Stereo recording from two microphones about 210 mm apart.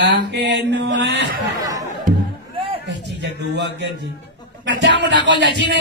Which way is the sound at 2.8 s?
55° right (ahead or behind).